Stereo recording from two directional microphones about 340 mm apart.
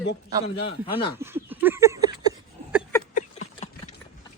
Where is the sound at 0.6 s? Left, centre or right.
Centre.